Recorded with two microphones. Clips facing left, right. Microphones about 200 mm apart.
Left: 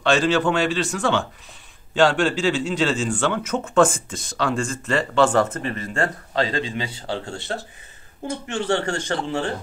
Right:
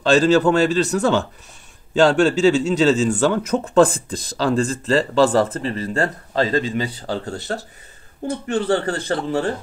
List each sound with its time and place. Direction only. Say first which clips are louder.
0.0 s speech: right 5 dB; 40° right (ahead or behind)